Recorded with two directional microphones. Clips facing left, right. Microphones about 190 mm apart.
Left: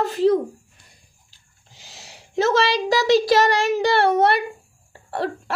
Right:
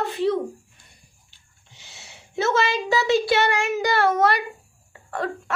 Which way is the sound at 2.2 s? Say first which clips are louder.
Left 3 dB; 35° left (ahead or behind).